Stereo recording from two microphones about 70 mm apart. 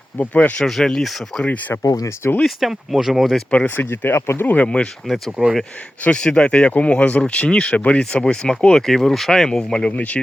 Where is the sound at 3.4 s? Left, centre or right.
Left.